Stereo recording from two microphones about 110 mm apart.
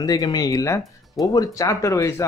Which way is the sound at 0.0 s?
35° left (ahead or behind).